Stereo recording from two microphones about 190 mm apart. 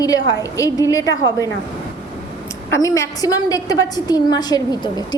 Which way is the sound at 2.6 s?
15° left (ahead or behind).